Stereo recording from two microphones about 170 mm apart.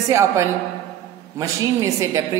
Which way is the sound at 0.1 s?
15° right (ahead or behind).